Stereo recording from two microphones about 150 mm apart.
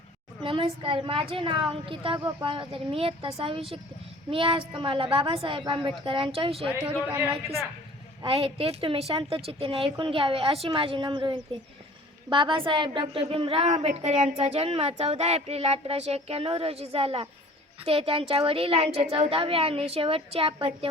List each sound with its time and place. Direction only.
0.4 s a woman's voice: 35° right (ahead or behind)
7.1 s a man's voice: 15° right (ahead or behind)
8.2 s a woman's voice: 40° right (ahead or behind)